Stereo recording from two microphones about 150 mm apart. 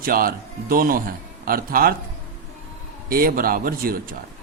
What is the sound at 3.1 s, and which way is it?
Speech, 75° right (ahead or behind).